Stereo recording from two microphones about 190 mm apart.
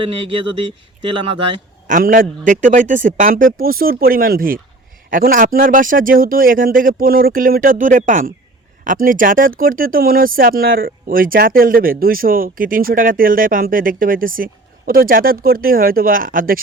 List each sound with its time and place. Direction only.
0.0 s speech: 30° right (ahead or behind)
1.9 s speech: 45° right (ahead or behind)